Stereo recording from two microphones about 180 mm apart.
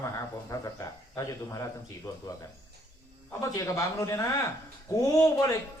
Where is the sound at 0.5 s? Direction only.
20° left (ahead or behind).